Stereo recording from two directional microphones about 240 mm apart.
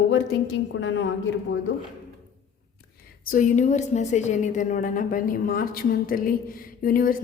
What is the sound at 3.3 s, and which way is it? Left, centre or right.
A woman's voice, left.